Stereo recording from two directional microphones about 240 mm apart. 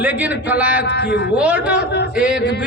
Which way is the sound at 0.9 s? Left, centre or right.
Left.